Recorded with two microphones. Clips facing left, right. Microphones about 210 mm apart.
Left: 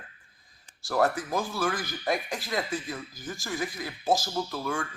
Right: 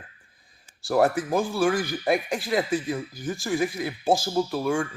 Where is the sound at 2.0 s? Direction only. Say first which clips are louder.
Right 2 dB; 15° right (ahead or behind).